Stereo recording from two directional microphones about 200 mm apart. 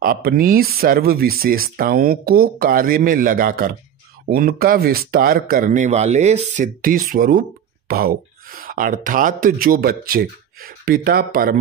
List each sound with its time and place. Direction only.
0.0 s speech: 45° right (ahead or behind)